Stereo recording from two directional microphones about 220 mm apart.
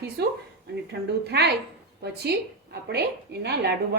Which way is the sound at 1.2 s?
50° right (ahead or behind).